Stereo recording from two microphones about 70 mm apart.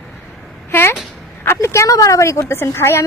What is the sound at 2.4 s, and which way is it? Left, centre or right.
Speech, left.